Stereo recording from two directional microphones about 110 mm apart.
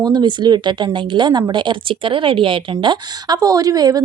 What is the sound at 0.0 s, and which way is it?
A woman's voice, 40° right (ahead or behind).